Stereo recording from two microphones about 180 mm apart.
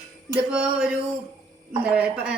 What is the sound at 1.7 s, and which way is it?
Speech, 5° right (ahead or behind).